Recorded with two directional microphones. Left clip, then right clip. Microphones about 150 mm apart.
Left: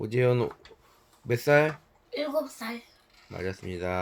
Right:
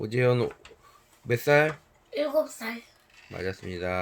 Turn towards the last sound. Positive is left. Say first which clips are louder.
# right 1 dB
turn(degrees=0)  # may be behind; listen again after turning